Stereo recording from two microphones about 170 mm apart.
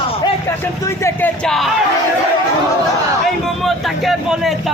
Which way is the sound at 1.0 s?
5° left (ahead or behind).